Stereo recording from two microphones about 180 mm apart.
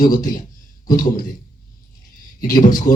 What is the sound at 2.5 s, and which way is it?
Speech, 50° left (ahead or behind).